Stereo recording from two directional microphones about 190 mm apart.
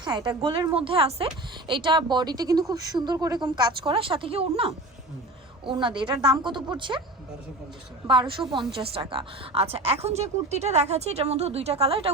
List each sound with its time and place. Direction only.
0.0 s speech: 25° right (ahead or behind)
8.0 s a woman's voice: 25° right (ahead or behind)